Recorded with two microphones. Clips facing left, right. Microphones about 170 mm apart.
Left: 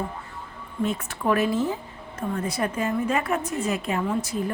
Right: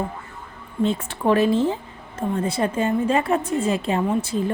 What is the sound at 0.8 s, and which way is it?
A woman's voice, 25° right (ahead or behind).